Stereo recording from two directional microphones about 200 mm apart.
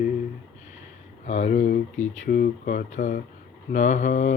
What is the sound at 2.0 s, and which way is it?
Mantra, 40° left (ahead or behind).